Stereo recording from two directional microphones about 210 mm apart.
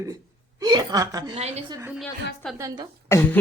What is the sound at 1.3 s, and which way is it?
Speech, 30° right (ahead or behind).